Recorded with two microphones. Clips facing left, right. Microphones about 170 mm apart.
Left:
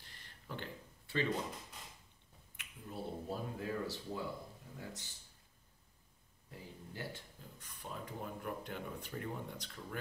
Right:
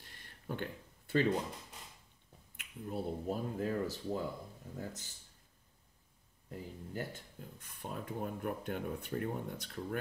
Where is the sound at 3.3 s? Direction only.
45° right (ahead or behind).